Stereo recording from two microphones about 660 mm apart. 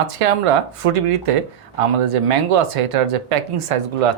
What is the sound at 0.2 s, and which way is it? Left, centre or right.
Speech, right.